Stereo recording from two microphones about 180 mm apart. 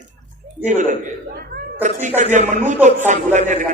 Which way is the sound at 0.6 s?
40° right (ahead or behind).